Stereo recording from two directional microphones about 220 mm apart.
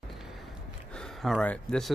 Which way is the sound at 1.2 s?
5° left (ahead or behind).